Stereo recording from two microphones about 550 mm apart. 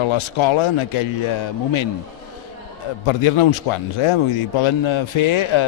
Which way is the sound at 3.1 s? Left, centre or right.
Left.